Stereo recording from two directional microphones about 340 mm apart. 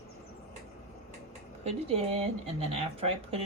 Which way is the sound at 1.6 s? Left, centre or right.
Centre.